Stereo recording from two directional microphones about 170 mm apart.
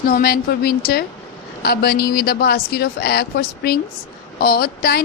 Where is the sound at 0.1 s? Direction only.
65° left (ahead or behind).